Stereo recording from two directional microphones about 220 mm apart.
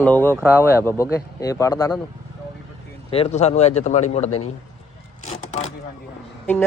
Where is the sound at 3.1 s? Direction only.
30° left (ahead or behind).